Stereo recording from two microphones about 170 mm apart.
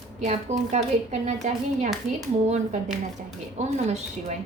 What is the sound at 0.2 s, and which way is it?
A woman's voice, 45° right (ahead or behind).